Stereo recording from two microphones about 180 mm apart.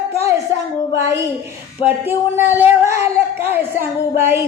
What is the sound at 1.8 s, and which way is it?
Speech, 10° right (ahead or behind).